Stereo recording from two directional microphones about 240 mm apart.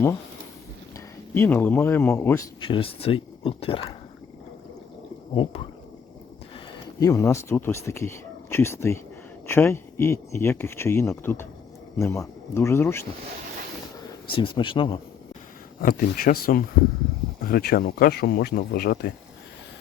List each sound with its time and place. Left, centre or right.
0.9 s speech: centre
5.3 s speech: left
7.0 s speech: centre
14.3 s speech: left
15.8 s speech: left